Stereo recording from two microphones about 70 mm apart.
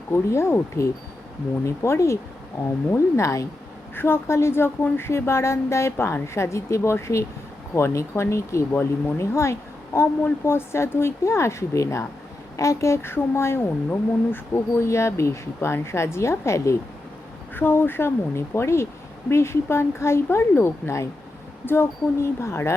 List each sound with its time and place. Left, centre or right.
0.1 s speech: left
3.9 s speech: left
8.7 s speech: left
17.5 s speech: left